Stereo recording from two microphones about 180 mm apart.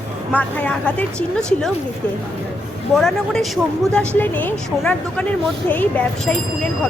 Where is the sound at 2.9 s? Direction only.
Centre (ahead or behind).